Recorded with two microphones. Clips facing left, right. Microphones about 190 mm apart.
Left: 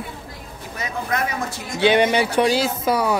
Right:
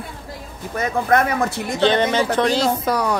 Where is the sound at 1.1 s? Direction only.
50° right (ahead or behind).